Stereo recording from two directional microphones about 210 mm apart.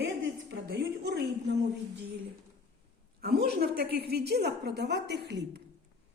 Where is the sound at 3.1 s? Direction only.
45° right (ahead or behind).